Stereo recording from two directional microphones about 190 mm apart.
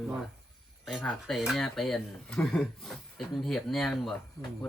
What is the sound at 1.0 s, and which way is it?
Speech, centre (ahead or behind).